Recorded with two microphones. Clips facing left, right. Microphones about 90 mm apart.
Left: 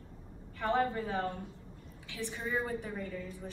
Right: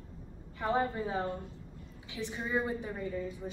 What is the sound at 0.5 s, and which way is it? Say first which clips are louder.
A woman's voice: even; 20° right (ahead or behind).